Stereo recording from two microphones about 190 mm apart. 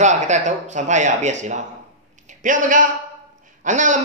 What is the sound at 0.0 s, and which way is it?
A man's voice, 40° right (ahead or behind).